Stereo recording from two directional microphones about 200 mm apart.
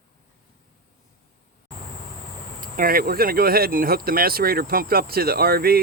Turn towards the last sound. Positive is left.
turn(degrees=-50)  # may be behind; listen again after turning